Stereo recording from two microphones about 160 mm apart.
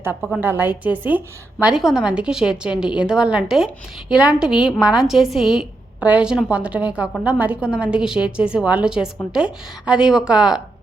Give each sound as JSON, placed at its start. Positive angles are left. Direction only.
{"t": 0.3, "sound": "a woman's voice", "side_deg": -15}